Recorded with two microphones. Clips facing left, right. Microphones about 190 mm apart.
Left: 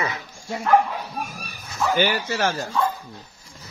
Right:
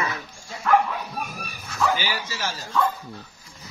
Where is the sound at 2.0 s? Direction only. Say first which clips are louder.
Left 8 dB; 55° left (ahead or behind).